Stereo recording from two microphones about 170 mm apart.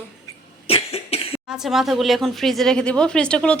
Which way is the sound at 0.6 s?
35° left (ahead or behind).